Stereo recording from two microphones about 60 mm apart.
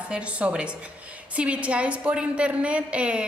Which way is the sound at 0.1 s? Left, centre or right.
Centre.